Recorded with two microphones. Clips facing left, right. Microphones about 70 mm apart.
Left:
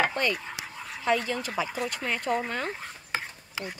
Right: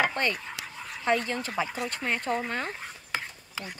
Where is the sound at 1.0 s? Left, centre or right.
Right.